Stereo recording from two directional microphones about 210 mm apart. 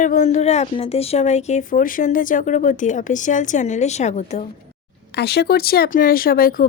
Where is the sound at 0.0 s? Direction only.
35° left (ahead or behind).